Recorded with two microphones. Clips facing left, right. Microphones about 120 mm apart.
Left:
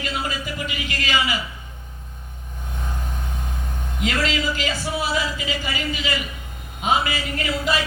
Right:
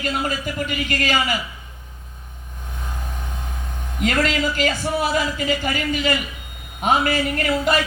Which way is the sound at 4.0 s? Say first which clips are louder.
Right 3 dB; 50° right (ahead or behind).